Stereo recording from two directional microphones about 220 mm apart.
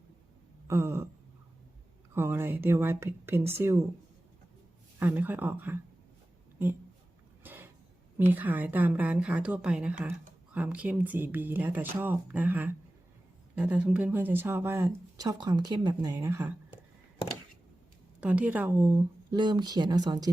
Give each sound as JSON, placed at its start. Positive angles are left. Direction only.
{"t": 0.7, "sound": "speech", "side_deg": -10}
{"t": 2.1, "sound": "speech", "side_deg": -10}
{"t": 4.9, "sound": "speech", "side_deg": -10}
{"t": 7.4, "sound": "a sound", "side_deg": -10}
{"t": 8.2, "sound": "speech", "side_deg": -10}
{"t": 18.2, "sound": "speech", "side_deg": -5}